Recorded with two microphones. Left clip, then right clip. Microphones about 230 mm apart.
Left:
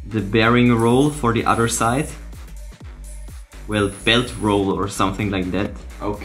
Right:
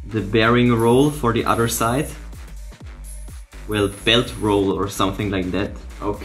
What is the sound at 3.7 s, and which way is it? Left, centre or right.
Speech, centre.